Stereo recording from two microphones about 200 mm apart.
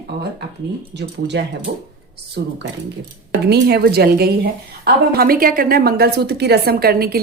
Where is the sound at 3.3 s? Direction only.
55° right (ahead or behind).